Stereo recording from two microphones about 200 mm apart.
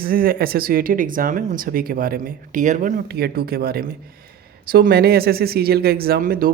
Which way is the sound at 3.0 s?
50° right (ahead or behind).